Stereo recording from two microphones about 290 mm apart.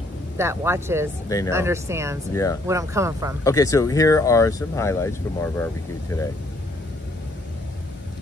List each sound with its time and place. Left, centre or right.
0.4 s speech: centre
2.3 s speech: centre
2.6 s speech: centre
3.4 s speech: centre